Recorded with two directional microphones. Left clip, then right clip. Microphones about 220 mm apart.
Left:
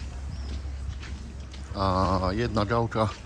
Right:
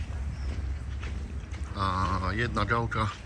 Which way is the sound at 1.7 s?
20° left (ahead or behind).